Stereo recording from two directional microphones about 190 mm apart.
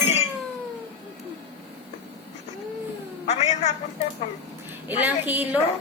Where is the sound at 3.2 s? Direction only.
35° left (ahead or behind).